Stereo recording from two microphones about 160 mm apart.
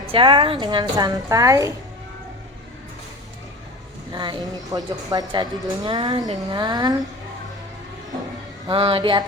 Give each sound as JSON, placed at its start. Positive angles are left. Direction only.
{"t": 0.0, "sound": "a woman's voice", "side_deg": -35}
{"t": 4.1, "sound": "a woman's voice", "side_deg": -25}
{"t": 8.7, "sound": "a sound", "side_deg": -35}